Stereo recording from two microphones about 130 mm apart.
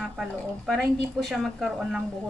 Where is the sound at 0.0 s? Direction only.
5° right (ahead or behind).